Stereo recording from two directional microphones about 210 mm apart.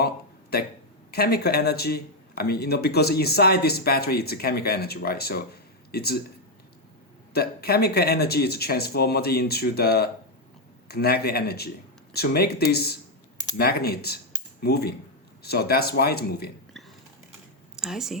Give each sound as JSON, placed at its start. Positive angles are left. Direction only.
{"t": 0.5, "sound": "speech", "side_deg": 50}
{"t": 7.3, "sound": "speech", "side_deg": 45}
{"t": 17.7, "sound": "speech", "side_deg": 0}